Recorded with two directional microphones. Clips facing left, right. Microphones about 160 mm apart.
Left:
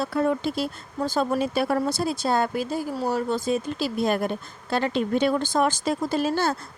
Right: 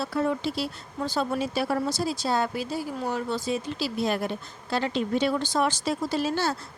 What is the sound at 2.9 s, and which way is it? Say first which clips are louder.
A woman's voice: left 5 dB; 35° left (ahead or behind).